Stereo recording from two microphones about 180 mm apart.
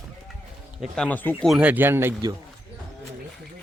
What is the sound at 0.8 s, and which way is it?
Speech, 5° left (ahead or behind).